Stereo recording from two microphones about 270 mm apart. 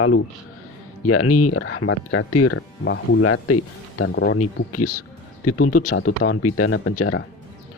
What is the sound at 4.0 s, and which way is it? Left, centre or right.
Speech, left.